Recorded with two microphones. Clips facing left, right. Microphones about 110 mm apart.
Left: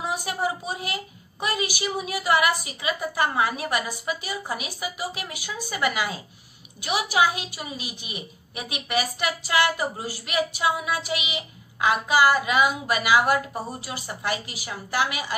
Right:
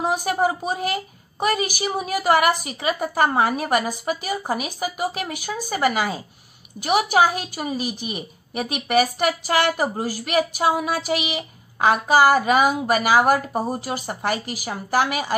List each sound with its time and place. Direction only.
0.6 s a woman's voice: 45° right (ahead or behind)